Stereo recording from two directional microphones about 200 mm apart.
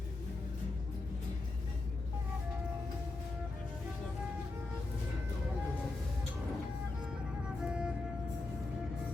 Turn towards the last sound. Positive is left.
turn(degrees=-5)  # may be behind; listen again after turning